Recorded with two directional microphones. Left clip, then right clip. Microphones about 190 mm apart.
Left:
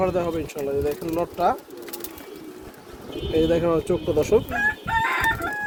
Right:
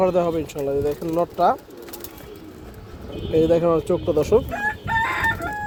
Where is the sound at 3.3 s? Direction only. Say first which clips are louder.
Right 3 dB; 30° right (ahead or behind).